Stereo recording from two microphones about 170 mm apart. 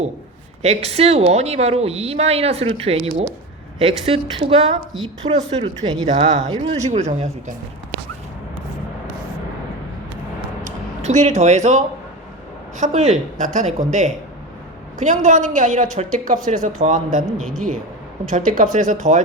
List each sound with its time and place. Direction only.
0.6 s speech: 40° right (ahead or behind)
10.6 s a sound: 45° right (ahead or behind)
12.7 s speech: 45° right (ahead or behind)
18.3 s speech: 50° right (ahead or behind)